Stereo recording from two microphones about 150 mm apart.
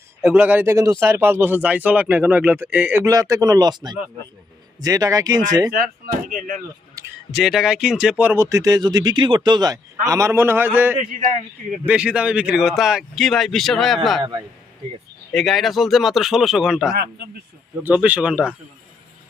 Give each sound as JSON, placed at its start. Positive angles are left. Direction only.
{"t": 0.2, "sound": "speech", "side_deg": -5}
{"t": 3.0, "sound": "speech", "side_deg": -20}
{"t": 5.8, "sound": "speech", "side_deg": -75}
{"t": 7.3, "sound": "speech", "side_deg": 0}
{"t": 15.3, "sound": "speech", "side_deg": 0}